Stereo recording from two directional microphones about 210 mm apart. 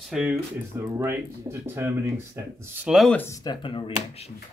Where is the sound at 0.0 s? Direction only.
Centre (ahead or behind).